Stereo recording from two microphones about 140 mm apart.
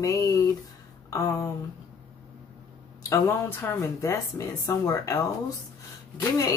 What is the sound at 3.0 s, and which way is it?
A woman's voice, 20° left (ahead or behind).